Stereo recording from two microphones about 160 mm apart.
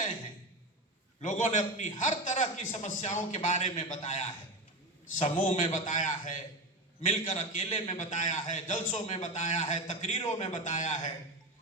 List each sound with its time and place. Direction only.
1.2 s a man's voice: 50° left (ahead or behind)